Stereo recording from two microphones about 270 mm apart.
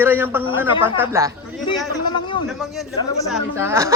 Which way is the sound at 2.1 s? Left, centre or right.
Centre.